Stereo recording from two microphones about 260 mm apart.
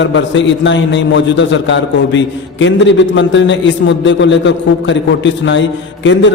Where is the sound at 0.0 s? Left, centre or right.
Left.